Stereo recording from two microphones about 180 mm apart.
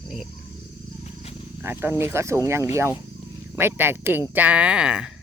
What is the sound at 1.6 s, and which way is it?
Speech, 10° right (ahead or behind).